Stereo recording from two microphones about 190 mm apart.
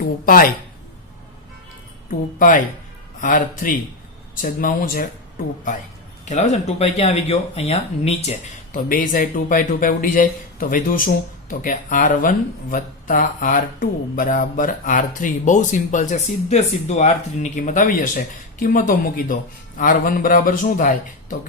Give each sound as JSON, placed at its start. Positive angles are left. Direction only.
{"t": 0.3, "sound": "speech", "side_deg": 50}
{"t": 2.0, "sound": "speech", "side_deg": 45}
{"t": 6.2, "sound": "speech", "side_deg": 40}
{"t": 8.7, "sound": "speech", "side_deg": 45}